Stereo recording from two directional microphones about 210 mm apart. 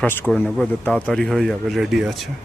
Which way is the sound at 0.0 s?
5° left (ahead or behind).